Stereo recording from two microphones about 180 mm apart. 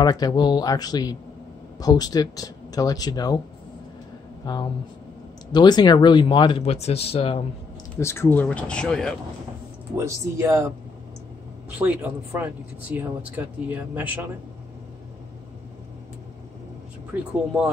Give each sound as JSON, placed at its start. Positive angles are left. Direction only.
{"t": 0.0, "sound": "speech", "side_deg": 20}
{"t": 4.4, "sound": "speech", "side_deg": 20}
{"t": 7.9, "sound": "speech", "side_deg": 15}
{"t": 9.9, "sound": "speech", "side_deg": -15}
{"t": 11.8, "sound": "speech", "side_deg": -10}